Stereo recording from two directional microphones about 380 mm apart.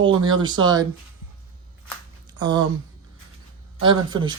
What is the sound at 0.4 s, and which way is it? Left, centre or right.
Speech, centre.